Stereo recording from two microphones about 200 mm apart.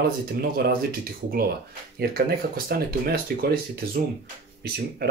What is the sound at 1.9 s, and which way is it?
Speech, 50° right (ahead or behind).